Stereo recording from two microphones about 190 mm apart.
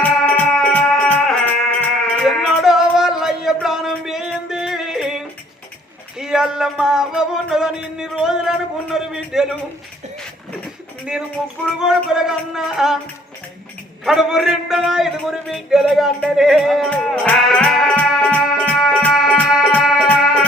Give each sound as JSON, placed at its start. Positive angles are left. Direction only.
{"t": 0.0, "sound": "music", "side_deg": 5}
{"t": 11.8, "sound": "music", "side_deg": -5}
{"t": 14.0, "sound": "a man's voice", "side_deg": 0}